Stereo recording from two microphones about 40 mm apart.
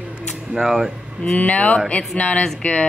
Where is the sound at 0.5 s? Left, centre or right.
Centre.